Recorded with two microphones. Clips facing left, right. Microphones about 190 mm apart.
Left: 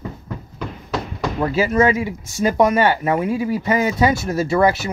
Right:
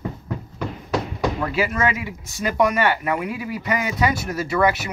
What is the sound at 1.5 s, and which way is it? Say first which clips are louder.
Speech: left 6 dB; 35° left (ahead or behind).